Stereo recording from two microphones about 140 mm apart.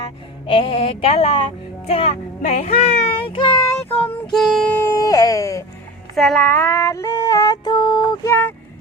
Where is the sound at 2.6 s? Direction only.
50° left (ahead or behind).